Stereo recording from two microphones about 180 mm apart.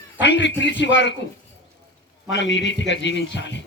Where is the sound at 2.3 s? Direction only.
80° left.